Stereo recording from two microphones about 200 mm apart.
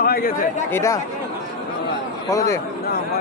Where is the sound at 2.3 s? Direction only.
15° left (ahead or behind).